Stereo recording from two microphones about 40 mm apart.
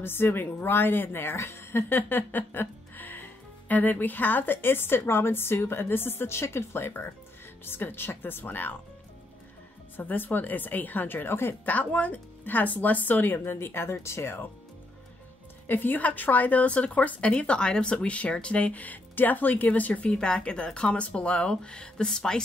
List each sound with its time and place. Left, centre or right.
0.0 s a woman's voice: left
7.6 s speech: left
9.9 s speech: left
11.6 s speech: left
13.5 s speech: left
15.6 s speech: left
20.1 s speech: left